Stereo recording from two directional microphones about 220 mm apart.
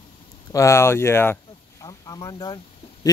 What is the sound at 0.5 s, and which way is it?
Speech, 15° left (ahead or behind).